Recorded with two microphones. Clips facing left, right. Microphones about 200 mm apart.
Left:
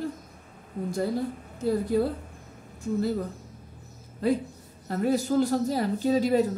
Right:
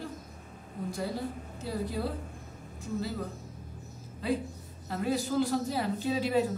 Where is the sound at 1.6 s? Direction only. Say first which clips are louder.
Left 9 dB; 50° left (ahead or behind).